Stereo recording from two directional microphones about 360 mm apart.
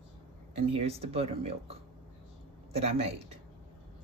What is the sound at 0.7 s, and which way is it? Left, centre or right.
Speech, centre.